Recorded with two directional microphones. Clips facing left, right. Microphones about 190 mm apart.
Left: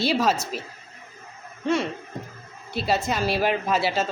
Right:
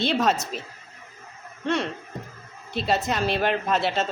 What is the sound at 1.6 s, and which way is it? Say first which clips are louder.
Speech: left 2 dB; 5° left (ahead or behind).